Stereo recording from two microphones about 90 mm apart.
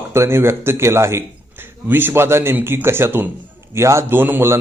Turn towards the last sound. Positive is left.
turn(degrees=-25)  # may be behind; listen again after turning